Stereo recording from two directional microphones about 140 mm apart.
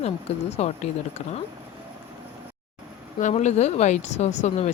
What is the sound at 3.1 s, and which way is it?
Speech, 60° left (ahead or behind).